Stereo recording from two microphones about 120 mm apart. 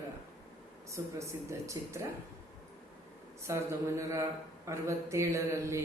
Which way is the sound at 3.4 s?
25° right (ahead or behind).